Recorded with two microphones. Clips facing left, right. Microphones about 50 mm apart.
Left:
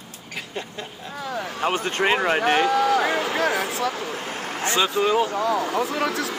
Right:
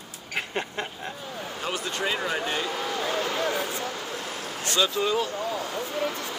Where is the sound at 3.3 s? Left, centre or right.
Left.